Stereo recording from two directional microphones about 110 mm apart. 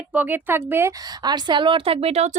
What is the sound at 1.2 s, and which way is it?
A woman's voice, 40° right (ahead or behind).